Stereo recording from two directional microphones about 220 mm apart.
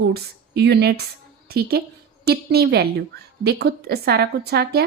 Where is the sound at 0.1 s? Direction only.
50° right (ahead or behind).